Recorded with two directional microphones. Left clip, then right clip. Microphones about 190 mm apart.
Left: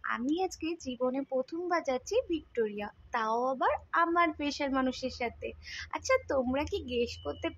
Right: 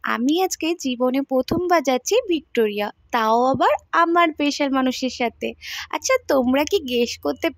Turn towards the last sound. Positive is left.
turn(degrees=-50)  # may be behind; listen again after turning